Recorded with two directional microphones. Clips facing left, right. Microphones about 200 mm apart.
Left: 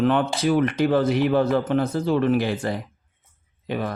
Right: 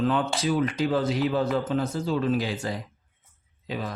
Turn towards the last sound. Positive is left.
turn(degrees=60)  # may be behind; listen again after turning